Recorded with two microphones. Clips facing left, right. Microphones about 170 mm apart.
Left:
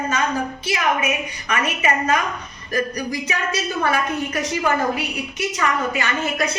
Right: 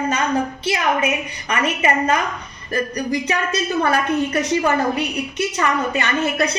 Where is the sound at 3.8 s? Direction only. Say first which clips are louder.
Right 4 dB; 35° right (ahead or behind).